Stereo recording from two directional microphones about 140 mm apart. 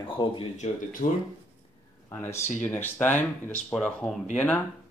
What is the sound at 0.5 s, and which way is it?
Speech, 65° left (ahead or behind).